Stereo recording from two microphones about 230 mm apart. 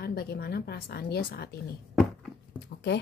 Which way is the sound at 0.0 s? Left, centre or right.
Left.